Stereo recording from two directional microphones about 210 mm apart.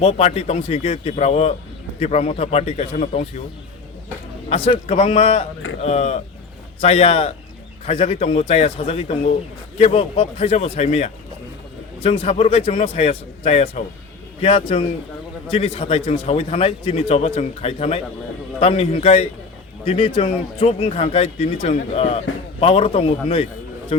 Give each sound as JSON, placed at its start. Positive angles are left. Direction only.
{"t": 0.0, "sound": "a man's voice", "side_deg": 30}
{"t": 4.4, "sound": "a man's voice", "side_deg": 30}